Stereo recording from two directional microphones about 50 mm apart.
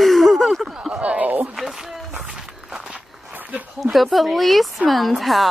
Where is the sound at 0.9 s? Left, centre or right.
Right.